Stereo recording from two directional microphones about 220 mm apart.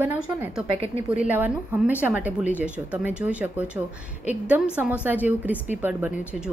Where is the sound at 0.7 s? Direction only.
25° right (ahead or behind).